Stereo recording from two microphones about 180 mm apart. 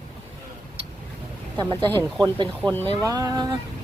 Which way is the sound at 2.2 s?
20° right (ahead or behind).